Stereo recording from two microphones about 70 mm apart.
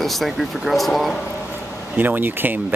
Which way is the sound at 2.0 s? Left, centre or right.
Right.